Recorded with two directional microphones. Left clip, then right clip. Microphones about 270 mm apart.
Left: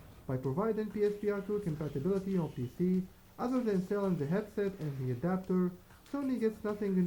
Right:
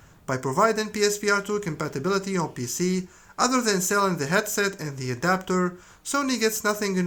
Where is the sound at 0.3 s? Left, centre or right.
Centre.